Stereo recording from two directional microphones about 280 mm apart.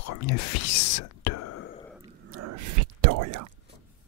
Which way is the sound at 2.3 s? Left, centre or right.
Right.